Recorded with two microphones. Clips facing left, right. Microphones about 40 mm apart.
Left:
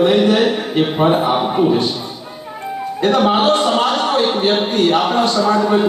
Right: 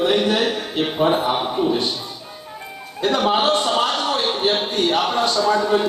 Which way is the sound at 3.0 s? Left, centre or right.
Left.